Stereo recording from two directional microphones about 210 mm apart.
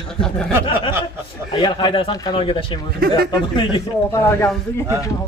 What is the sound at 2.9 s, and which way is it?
Speech, 45° right (ahead or behind).